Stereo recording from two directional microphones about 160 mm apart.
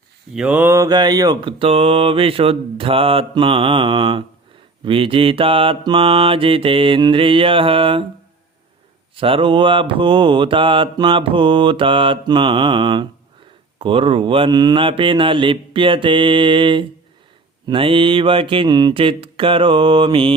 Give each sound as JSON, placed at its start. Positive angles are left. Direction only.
{"t": 0.3, "sound": "mantra", "side_deg": -10}
{"t": 9.1, "sound": "mantra", "side_deg": -35}